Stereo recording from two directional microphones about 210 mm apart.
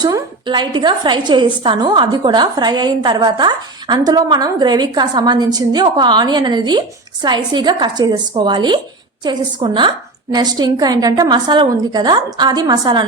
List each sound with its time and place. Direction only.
0.0 s a woman's voice: 20° right (ahead or behind)